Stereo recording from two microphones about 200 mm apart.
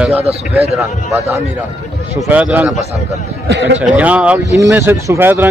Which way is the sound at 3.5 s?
60° right (ahead or behind).